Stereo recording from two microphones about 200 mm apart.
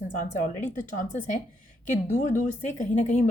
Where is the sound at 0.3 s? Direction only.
40° left (ahead or behind).